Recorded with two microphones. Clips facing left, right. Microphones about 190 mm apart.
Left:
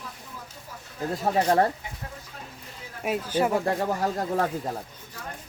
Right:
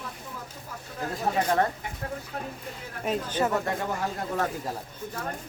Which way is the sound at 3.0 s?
10° left (ahead or behind).